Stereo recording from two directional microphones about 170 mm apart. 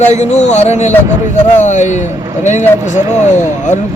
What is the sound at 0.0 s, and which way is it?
Speech, 40° left (ahead or behind).